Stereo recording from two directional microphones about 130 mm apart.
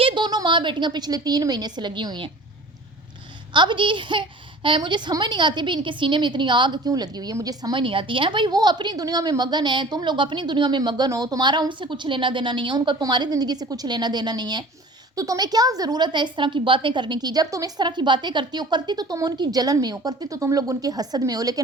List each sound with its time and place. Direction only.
0.0 s a child's voice: 35° right (ahead or behind)
3.5 s a child's voice: 35° right (ahead or behind)